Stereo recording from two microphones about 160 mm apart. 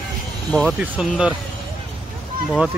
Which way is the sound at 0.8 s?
5° right (ahead or behind).